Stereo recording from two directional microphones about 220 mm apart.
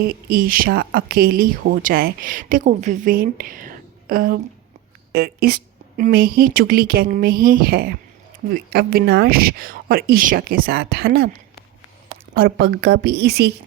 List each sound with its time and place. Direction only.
0.0 s speech: 40° right (ahead or behind)
12.3 s speech: 45° right (ahead or behind)